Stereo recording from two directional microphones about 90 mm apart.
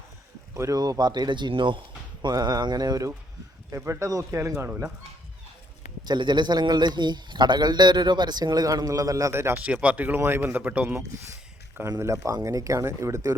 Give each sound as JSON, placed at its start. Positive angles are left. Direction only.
{"t": 0.5, "sound": "a man's voice", "side_deg": -35}
{"t": 2.2, "sound": "a man's voice", "side_deg": -45}
{"t": 3.7, "sound": "speech", "side_deg": -35}
{"t": 6.1, "sound": "a man's voice", "side_deg": -55}
{"t": 9.6, "sound": "speech", "side_deg": -15}
{"t": 11.9, "sound": "speech", "side_deg": -30}